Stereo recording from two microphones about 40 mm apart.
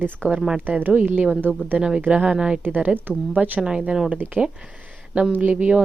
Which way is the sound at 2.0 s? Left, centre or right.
Right.